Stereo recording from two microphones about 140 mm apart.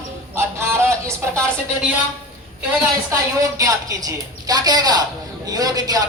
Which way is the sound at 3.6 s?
25° right (ahead or behind).